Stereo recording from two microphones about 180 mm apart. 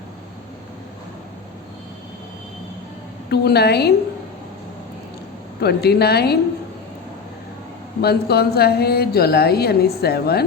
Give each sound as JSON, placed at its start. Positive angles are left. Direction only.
{"t": 3.2, "sound": "a woman's voice", "side_deg": 65}
{"t": 5.5, "sound": "a woman's voice", "side_deg": 65}
{"t": 8.0, "sound": "a woman's voice", "side_deg": 60}